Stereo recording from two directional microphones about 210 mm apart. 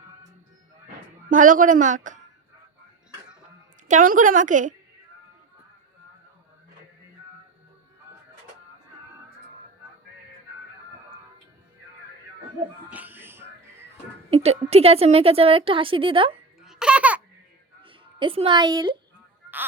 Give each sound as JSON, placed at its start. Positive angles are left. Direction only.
{"t": 1.3, "sound": "a woman's voice", "side_deg": -40}
{"t": 3.8, "sound": "a woman's voice", "side_deg": -40}
{"t": 12.9, "sound": "music", "side_deg": -10}
{"t": 14.3, "sound": "a woman's voice", "side_deg": -30}
{"t": 16.6, "sound": "baby laughter", "side_deg": -5}
{"t": 17.8, "sound": "a woman's voice", "side_deg": -25}